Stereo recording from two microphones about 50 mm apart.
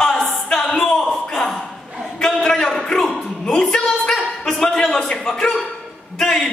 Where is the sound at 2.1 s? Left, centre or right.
Centre.